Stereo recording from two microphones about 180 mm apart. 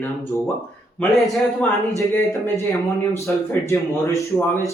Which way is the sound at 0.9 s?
Centre (ahead or behind).